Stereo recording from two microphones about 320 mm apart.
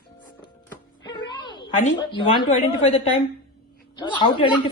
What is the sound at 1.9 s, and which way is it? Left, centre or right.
Speech, centre.